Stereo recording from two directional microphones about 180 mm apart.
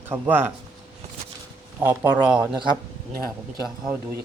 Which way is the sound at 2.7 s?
15° left (ahead or behind).